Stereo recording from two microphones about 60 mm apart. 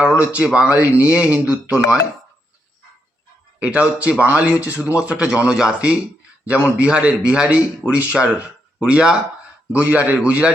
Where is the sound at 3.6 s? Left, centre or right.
Right.